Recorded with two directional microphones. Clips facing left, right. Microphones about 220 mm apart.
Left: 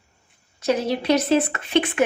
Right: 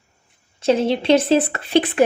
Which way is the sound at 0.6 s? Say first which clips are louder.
Right 4 dB; 25° right (ahead or behind).